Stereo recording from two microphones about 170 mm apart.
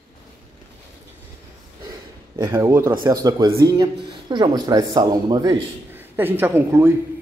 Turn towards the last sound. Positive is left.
turn(degrees=-15)  # may be behind; listen again after turning